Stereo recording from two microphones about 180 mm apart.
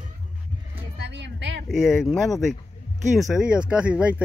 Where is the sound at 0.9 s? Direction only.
70° right (ahead or behind).